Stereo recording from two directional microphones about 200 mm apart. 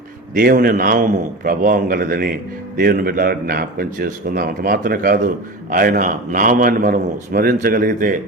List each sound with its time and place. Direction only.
0.3 s a man's voice: 45° right (ahead or behind)